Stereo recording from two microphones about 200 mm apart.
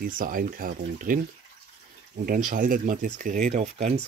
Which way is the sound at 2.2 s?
45° right (ahead or behind).